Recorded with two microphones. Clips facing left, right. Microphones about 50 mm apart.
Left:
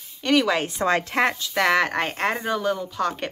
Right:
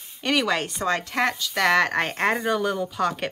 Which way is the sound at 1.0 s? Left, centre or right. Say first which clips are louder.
Left 2 dB; left.